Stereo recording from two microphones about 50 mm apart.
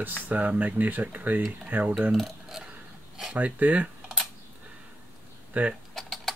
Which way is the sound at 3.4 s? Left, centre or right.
Right.